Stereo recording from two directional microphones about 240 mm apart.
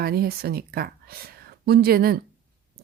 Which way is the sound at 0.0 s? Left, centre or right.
Right.